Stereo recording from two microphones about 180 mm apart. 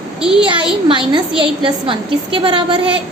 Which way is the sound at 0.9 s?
25° right (ahead or behind).